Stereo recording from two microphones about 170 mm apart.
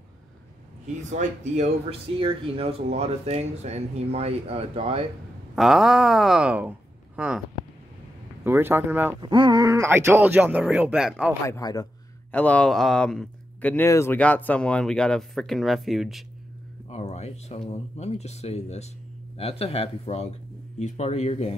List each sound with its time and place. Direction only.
1.1 s speech: 45° right (ahead or behind)
5.6 s speech: centre (ahead or behind)
8.5 s speech: 15° right (ahead or behind)
9.2 s speech: 30° right (ahead or behind); by 11.3 s 5° right (ahead or behind)
11.4 s a man's voice: 20° left (ahead or behind)
12.3 s speech: 10° left (ahead or behind)
16.9 s speech: 40° left (ahead or behind)